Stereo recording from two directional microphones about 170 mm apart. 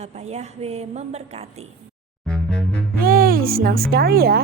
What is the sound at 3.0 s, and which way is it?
Speech, 60° right (ahead or behind).